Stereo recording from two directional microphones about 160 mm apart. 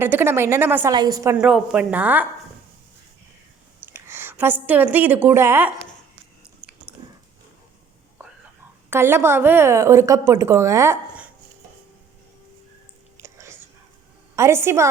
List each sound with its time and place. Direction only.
0.0 s a woman's voice: 15° right (ahead or behind)
0.9 s a woman's voice: 25° right (ahead or behind)
1.4 s a woman's voice: 5° right (ahead or behind)
3.8 s a woman's voice: 15° right (ahead or behind)
6.6 s biting: 5° right (ahead or behind)
8.9 s a woman's voice: 15° right (ahead or behind)
13.1 s whispering: 15° right (ahead or behind)
14.3 s a woman's voice: 15° right (ahead or behind)